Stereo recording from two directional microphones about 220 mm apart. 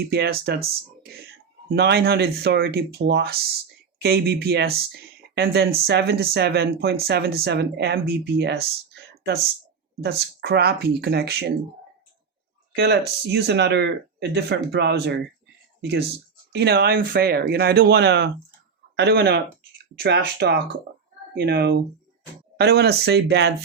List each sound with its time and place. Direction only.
0.0 s speech: 45° right (ahead or behind)
12.7 s speech: 45° right (ahead or behind)